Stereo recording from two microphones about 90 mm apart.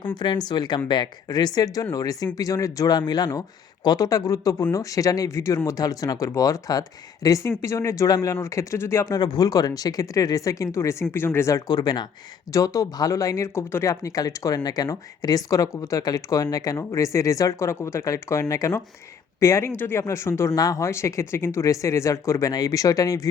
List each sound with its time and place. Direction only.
0.0 s speech: 60° left (ahead or behind); by 9.1 s 30° left (ahead or behind)
9.1 s speech: 50° left (ahead or behind); by 11.6 s 30° left (ahead or behind)
11.7 s speech: 50° left (ahead or behind)
12.5 s speech: 40° left (ahead or behind)